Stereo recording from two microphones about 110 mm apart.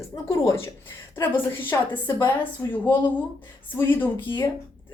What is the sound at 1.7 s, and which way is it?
Speech, 30° left (ahead or behind).